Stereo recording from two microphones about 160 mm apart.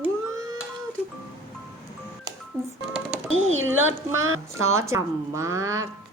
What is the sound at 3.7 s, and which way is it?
A woman's voice, 15° right (ahead or behind).